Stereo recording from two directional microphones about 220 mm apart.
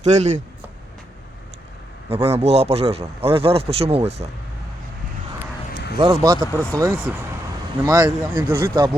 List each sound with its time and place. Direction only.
0.0 s speech: 30° right (ahead or behind)
2.0 s a man's voice: 25° right (ahead or behind)
6.0 s a man's voice: 20° right (ahead or behind)